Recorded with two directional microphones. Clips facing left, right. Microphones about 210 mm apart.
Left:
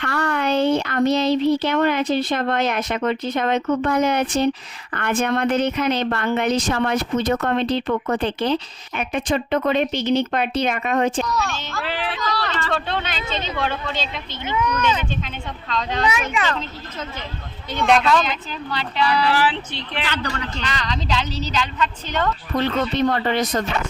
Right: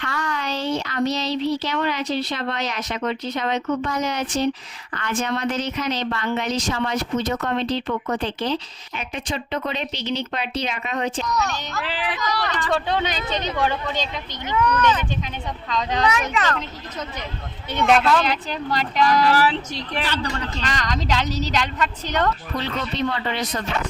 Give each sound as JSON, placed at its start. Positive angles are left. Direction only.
{"t": 0.0, "sound": "a woman's voice", "side_deg": 60}
{"t": 11.3, "sound": "speech", "side_deg": -20}
{"t": 14.4, "sound": "speech", "side_deg": 10}
{"t": 15.7, "sound": "speech", "side_deg": -15}
{"t": 16.3, "sound": "speech", "side_deg": 15}
{"t": 17.8, "sound": "speech", "side_deg": -5}
{"t": 18.7, "sound": "speech", "side_deg": -45}
{"t": 20.7, "sound": "speech", "side_deg": -40}
{"t": 22.5, "sound": "speech", "side_deg": 50}